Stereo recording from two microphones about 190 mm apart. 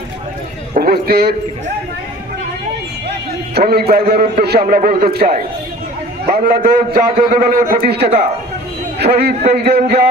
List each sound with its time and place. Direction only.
0.7 s a man's voice: 50° right (ahead or behind)
3.1 s a man's voice: 55° right (ahead or behind)